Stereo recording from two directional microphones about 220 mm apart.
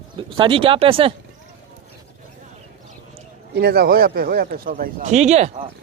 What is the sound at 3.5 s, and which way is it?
Speech, 45° right (ahead or behind).